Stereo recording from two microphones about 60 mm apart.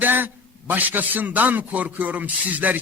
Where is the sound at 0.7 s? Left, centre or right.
Right.